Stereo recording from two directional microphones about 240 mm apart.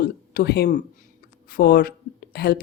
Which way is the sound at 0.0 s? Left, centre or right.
Left.